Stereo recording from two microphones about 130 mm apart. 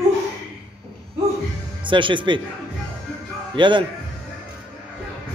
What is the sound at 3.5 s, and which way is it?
Speech, 35° right (ahead or behind).